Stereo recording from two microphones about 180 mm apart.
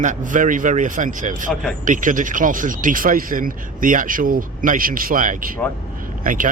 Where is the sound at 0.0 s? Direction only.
45° right (ahead or behind).